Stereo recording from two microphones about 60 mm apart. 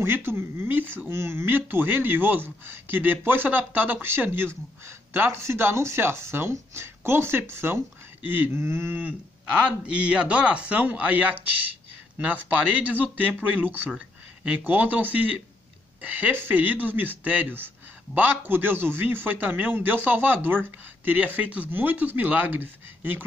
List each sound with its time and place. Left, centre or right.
0.0 s speech: right
9.7 s speech: centre
13.1 s speech: right
13.9 s a sound: right
14.6 s speech: right